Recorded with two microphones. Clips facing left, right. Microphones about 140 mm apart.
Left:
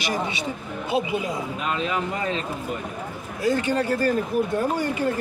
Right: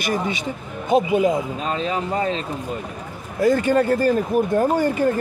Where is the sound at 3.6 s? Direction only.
50° right (ahead or behind).